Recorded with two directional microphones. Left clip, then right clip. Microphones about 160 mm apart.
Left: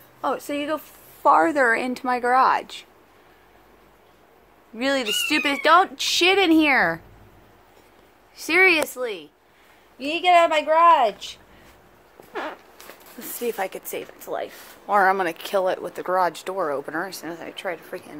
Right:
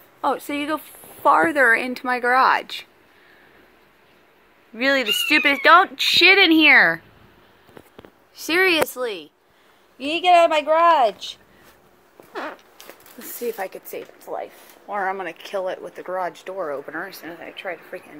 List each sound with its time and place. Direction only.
0.2 s a woman's voice: 20° right (ahead or behind)
1.2 s speech: centre (ahead or behind)
4.7 s speech: 10° right (ahead or behind)
8.4 s a woman's voice: 15° right (ahead or behind)
12.3 s a sound: 60° right (ahead or behind)
13.3 s speech: 5° left (ahead or behind)
14.9 s speech: 35° left (ahead or behind)